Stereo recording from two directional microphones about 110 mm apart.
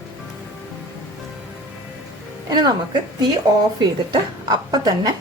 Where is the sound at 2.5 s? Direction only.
40° right (ahead or behind).